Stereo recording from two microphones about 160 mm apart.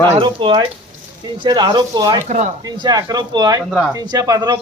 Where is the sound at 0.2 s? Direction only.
35° right (ahead or behind).